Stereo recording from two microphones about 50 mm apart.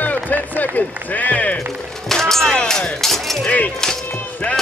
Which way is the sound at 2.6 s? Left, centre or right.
Centre.